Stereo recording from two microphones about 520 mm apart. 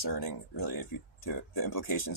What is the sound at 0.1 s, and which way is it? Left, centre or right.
Speech, left.